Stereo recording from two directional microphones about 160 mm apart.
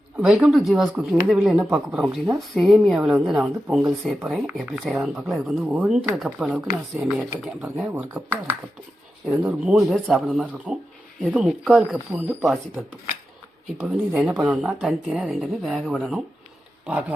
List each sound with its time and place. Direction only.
0.2 s speech: 5° right (ahead or behind)
13.8 s speech: 5° right (ahead or behind)